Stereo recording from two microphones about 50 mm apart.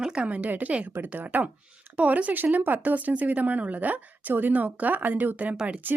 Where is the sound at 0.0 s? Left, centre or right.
Right.